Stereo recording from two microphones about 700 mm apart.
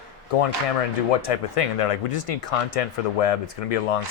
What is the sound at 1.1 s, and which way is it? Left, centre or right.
Speech, left.